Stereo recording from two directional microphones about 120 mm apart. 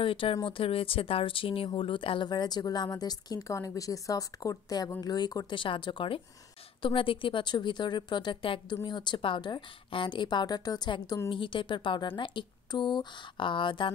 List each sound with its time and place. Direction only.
0.0 s speech: 50° left (ahead or behind)